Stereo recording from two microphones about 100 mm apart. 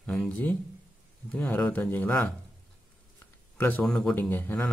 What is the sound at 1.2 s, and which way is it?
Speech, 15° left (ahead or behind).